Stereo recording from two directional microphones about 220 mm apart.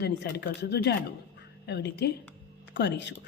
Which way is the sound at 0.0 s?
50° left (ahead or behind).